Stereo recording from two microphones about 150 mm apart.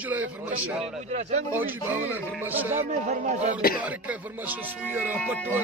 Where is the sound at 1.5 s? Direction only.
10° right (ahead or behind).